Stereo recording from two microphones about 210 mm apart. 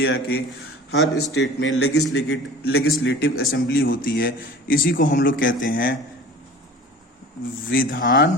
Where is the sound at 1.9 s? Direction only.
90° left.